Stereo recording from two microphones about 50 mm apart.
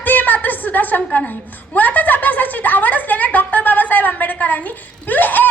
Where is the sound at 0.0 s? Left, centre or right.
Left.